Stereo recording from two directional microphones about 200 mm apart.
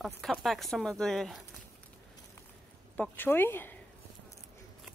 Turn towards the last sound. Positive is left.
turn(degrees=10)  # may be behind; listen again after turning